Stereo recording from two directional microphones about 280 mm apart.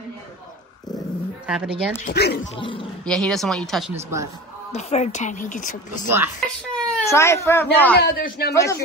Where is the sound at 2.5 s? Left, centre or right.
Centre.